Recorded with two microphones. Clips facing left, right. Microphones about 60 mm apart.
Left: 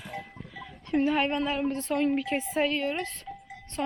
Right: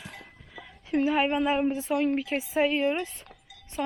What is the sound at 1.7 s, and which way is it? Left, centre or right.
Speech, centre.